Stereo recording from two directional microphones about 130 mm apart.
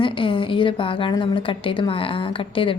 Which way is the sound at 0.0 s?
40° left (ahead or behind).